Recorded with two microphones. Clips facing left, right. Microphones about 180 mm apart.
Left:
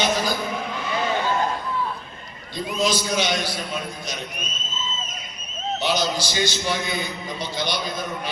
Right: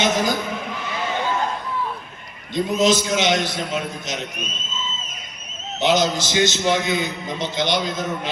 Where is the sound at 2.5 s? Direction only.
20° right (ahead or behind).